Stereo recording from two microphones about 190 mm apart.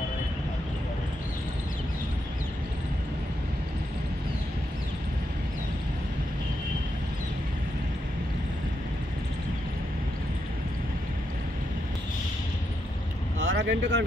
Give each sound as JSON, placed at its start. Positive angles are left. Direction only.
{"t": 13.4, "sound": "vehicle", "side_deg": -80}